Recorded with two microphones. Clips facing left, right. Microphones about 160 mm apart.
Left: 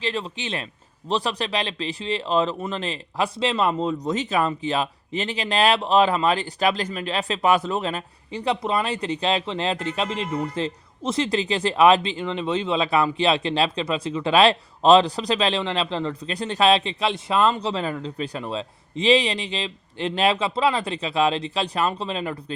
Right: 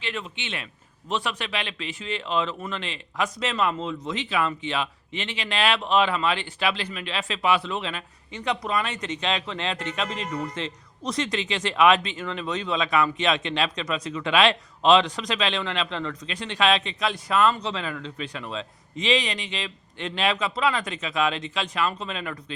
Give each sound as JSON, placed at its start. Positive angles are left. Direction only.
{"t": 0.0, "sound": "a man's voice", "side_deg": 35}